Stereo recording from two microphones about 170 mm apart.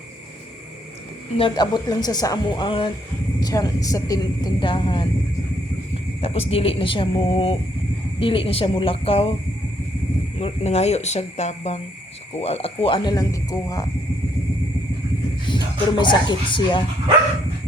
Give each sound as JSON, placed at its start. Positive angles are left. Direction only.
{"t": 1.4, "sound": "speech", "side_deg": 25}
{"t": 6.2, "sound": "speech", "side_deg": 35}
{"t": 10.4, "sound": "speech", "side_deg": 40}
{"t": 15.4, "sound": "speech", "side_deg": 25}